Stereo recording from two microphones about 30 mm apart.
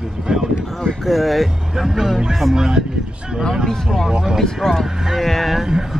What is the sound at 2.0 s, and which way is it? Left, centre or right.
Speech, centre.